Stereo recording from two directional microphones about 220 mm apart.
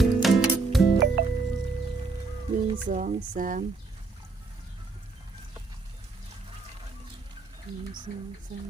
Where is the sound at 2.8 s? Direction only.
35° right (ahead or behind).